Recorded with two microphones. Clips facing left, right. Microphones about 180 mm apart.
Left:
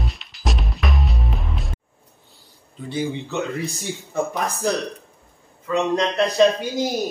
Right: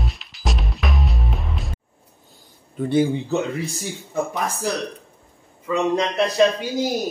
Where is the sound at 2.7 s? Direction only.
55° right (ahead or behind).